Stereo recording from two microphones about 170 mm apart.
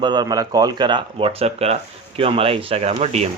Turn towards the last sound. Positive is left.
turn(degrees=-40)  # may be behind; listen again after turning